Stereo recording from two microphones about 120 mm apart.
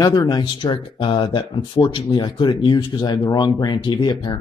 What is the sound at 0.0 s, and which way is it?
Speech, 30° left (ahead or behind).